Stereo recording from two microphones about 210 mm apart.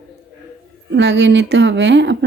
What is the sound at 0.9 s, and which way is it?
Speech, 60° right (ahead or behind).